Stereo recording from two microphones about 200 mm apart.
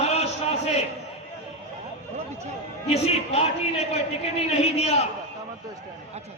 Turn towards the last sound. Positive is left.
turn(degrees=30)  # may be behind; listen again after turning